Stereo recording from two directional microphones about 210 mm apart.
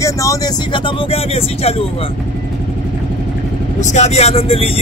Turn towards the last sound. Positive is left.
turn(degrees=25)  # may be behind; listen again after turning